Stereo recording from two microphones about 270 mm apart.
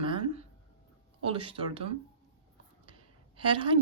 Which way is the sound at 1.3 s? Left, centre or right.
Right.